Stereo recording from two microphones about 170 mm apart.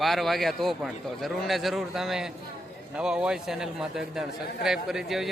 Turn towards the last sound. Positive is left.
turn(degrees=0)  # may be behind; listen again after turning